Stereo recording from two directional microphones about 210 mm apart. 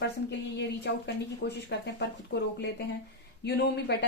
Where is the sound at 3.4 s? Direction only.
55° left (ahead or behind).